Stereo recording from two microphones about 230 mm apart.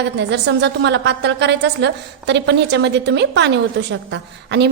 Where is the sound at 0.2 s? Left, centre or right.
Right.